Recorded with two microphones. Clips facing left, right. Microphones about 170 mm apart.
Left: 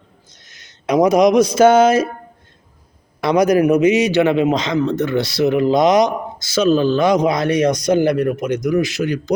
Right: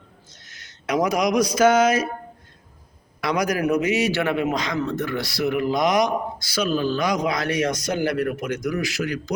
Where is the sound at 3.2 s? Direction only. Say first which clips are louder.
Left 9 dB; 25° left (ahead or behind).